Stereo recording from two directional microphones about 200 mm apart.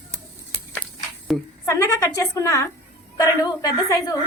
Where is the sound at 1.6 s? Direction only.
15° left (ahead or behind).